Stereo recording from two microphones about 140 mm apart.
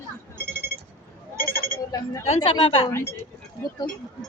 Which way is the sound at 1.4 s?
90° left.